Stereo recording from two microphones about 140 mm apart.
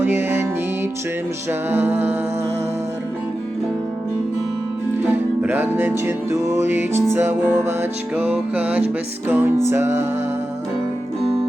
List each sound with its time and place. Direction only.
0.0 s music: 15° right (ahead or behind)
1.7 s music: 15° right (ahead or behind)
5.1 s music: 15° right (ahead or behind)